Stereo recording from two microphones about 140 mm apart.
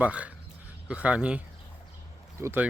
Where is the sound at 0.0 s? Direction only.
10° right (ahead or behind).